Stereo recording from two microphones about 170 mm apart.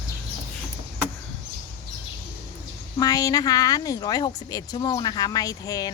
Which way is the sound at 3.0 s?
20° left (ahead or behind).